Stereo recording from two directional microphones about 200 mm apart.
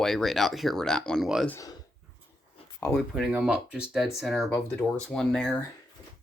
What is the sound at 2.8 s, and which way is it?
Speech, 10° left (ahead or behind).